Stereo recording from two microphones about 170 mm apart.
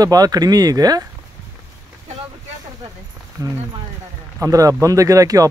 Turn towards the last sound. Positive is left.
turn(degrees=-20)  # may be behind; listen again after turning